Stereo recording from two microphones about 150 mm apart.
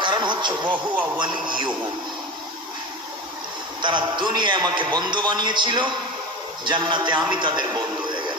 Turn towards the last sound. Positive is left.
turn(degrees=-30)  # may be behind; listen again after turning